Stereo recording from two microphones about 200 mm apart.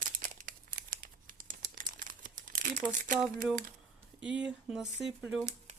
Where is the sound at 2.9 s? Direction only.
40° right (ahead or behind).